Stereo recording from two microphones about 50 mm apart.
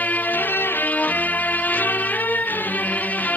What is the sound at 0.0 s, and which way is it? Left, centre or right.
Music, left.